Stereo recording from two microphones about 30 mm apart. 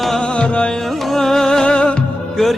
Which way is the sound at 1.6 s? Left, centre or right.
Left.